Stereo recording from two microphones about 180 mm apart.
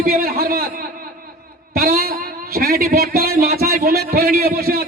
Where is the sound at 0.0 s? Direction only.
55° right (ahead or behind).